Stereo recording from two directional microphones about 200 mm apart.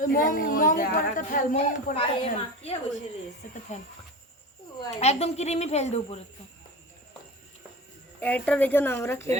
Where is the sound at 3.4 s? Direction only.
40° left (ahead or behind).